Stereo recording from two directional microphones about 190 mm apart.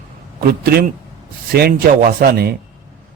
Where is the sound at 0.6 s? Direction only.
55° right (ahead or behind).